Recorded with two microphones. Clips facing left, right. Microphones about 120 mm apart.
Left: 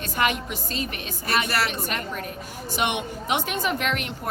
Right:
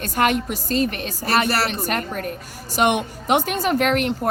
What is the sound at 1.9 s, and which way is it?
A woman's voice, 45° right (ahead or behind).